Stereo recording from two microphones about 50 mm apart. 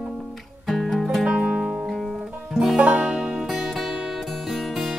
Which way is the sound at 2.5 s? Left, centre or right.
Centre.